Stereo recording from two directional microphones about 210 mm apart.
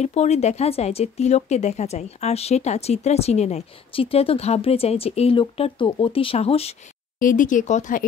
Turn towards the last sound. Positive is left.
turn(degrees=35)  # may be behind; listen again after turning